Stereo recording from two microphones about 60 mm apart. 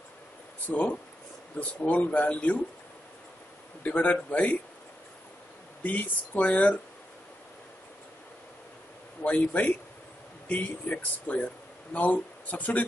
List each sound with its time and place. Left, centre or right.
0.7 s speech: left
3.8 s speech: left
5.9 s speech: left
9.2 s speech: left